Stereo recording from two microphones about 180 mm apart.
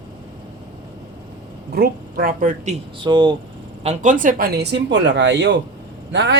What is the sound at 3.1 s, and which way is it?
Speech, 25° right (ahead or behind).